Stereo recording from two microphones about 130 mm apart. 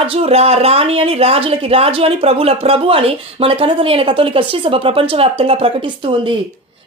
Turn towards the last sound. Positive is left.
turn(degrees=-40)  # may be behind; listen again after turning